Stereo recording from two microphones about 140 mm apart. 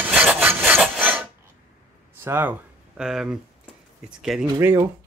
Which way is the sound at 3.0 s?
5° right (ahead or behind).